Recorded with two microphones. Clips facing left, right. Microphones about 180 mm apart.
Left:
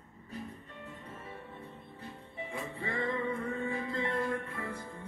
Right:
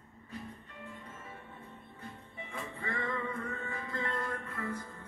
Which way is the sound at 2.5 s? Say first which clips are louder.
Left 2 dB; 30° left (ahead or behind).